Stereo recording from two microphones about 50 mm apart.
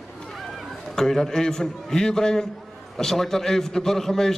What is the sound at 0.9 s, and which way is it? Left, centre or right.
A man's voice, centre.